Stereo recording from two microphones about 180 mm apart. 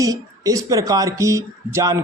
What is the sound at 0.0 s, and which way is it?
A woman's voice, 20° right (ahead or behind).